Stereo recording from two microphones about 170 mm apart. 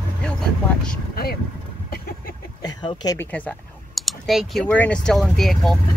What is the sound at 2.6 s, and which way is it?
Speech, 25° left (ahead or behind).